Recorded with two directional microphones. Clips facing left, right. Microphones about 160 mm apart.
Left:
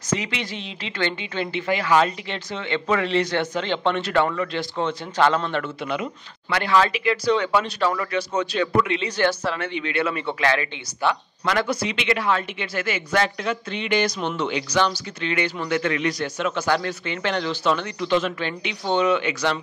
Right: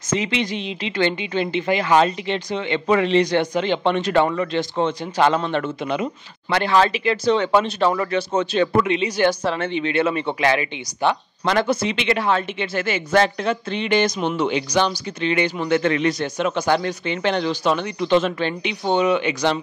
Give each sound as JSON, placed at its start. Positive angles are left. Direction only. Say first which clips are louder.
{"t": 0.1, "sound": "speech", "louder": "right 5 dB", "side_deg": -25}
{"t": 14.2, "sound": "speech", "louder": "right 4 dB", "side_deg": -10}